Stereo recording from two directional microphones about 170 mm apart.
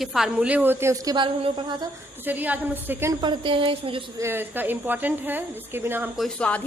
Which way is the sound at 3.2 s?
30° right (ahead or behind).